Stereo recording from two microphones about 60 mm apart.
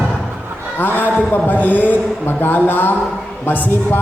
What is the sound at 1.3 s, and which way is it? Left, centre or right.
A man's voice, left.